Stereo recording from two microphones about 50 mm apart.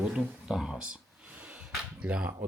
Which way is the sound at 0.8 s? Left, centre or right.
Right.